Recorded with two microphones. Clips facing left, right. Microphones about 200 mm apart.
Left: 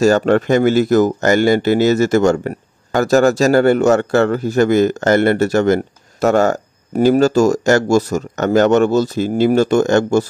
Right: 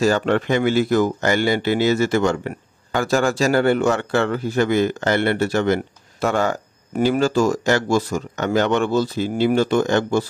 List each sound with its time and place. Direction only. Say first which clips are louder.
0.0 s speech: left 6 dB; 45° left (ahead or behind)